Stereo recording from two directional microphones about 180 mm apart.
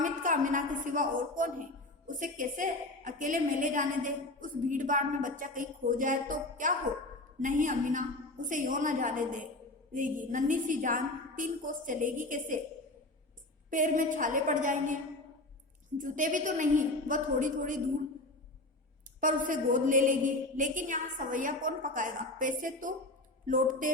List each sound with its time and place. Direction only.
0.0 s a woman's voice: 45° right (ahead or behind)
13.7 s a woman's voice: 45° right (ahead or behind)
16.0 s a woman's voice: 45° right (ahead or behind)
19.2 s a woman's voice: 45° right (ahead or behind)